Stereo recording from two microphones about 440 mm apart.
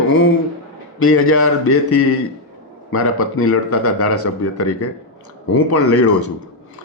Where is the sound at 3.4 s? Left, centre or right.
Left.